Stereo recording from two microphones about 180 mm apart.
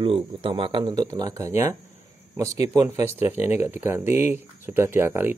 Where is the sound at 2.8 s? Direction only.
15° right (ahead or behind).